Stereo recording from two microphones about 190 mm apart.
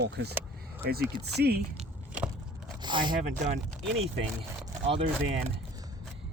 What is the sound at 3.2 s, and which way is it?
Speech, 40° right (ahead or behind).